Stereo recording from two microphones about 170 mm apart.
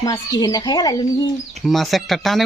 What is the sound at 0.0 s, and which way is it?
Speech, 20° left (ahead or behind).